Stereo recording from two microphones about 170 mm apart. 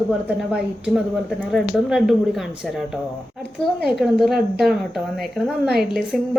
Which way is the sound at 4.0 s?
Centre (ahead or behind).